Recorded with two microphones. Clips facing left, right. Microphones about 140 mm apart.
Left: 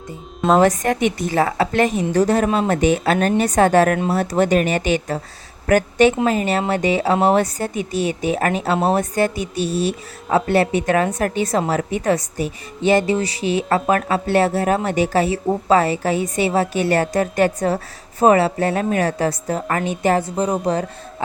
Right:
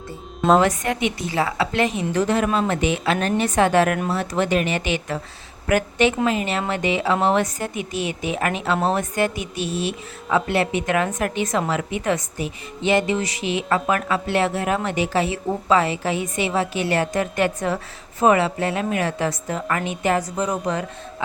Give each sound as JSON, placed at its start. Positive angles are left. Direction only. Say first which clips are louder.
{"t": 0.6, "sound": "a woman's voice", "louder": "left 5 dB", "side_deg": 40}